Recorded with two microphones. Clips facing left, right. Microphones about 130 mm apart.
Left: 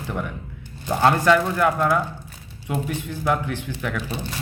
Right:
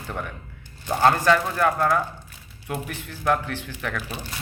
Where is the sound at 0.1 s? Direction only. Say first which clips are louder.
Left 3 dB; 15° left (ahead or behind).